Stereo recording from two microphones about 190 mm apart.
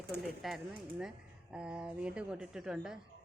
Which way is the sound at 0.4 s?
Centre (ahead or behind).